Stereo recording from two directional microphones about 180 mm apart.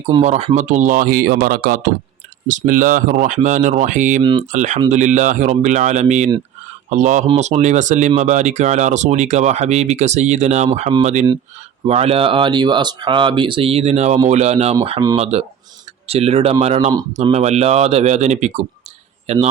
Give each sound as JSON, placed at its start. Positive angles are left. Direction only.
{"t": 0.1, "sound": "speech", "side_deg": -40}
{"t": 4.2, "sound": "speech", "side_deg": -25}
{"t": 4.5, "sound": "speech", "side_deg": -40}